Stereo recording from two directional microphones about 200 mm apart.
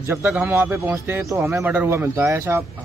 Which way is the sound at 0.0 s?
10° right (ahead or behind).